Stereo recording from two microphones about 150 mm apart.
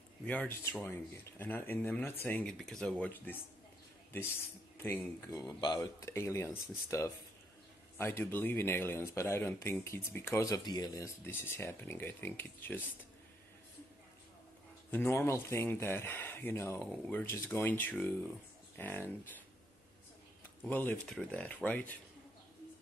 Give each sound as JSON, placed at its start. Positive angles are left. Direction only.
{"t": 0.2, "sound": "speech", "side_deg": 10}
{"t": 4.7, "sound": "speech", "side_deg": 15}
{"t": 14.9, "sound": "speech", "side_deg": 15}
{"t": 20.6, "sound": "speech", "side_deg": 10}